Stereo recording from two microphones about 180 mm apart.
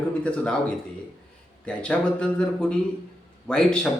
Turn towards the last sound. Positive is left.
turn(degrees=5)  # may be behind; listen again after turning